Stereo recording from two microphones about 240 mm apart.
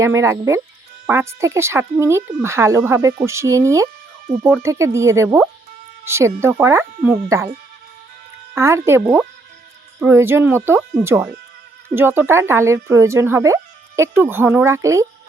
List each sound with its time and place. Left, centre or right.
0.0 s speech: centre
8.5 s speech: centre
10.0 s speech: centre